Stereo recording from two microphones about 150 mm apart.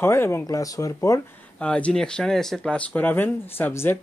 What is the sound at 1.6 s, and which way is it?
Speech, 5° left (ahead or behind).